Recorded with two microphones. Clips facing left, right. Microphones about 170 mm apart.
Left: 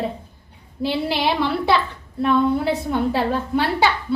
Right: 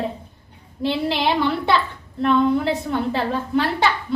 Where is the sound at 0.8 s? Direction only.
5° left (ahead or behind).